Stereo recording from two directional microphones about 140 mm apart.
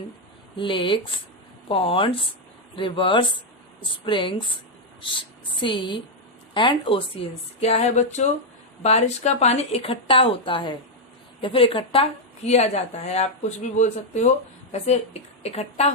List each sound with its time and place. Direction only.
0.5 s a woman's voice: 35° left (ahead or behind)
5.6 s a woman's voice: 35° left (ahead or behind)
7.6 s a woman's voice: 50° left (ahead or behind)
12.5 s speech: 50° left (ahead or behind)